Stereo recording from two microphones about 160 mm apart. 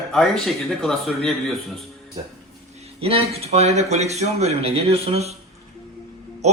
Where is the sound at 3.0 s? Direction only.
35° right (ahead or behind).